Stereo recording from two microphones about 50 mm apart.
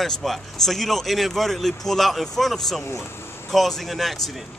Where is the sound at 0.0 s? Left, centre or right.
Centre.